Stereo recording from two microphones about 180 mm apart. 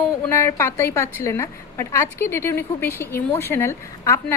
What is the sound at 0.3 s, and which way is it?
A woman's voice, 15° left (ahead or behind).